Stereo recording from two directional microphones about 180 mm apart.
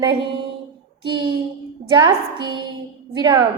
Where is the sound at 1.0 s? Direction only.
25° right (ahead or behind).